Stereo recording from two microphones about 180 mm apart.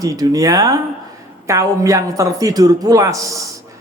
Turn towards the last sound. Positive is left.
turn(degrees=-20)  # may be behind; listen again after turning